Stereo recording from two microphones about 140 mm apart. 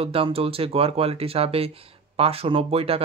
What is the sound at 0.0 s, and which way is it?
Speech, 45° right (ahead or behind).